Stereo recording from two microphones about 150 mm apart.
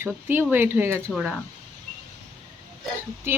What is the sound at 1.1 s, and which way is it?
Speech, 5° right (ahead or behind).